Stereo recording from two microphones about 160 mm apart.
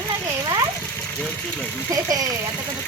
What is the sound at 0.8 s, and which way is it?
Engine, 10° left (ahead or behind).